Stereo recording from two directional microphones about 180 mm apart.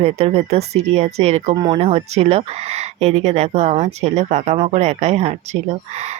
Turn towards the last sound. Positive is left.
turn(degrees=-40)  # may be behind; listen again after turning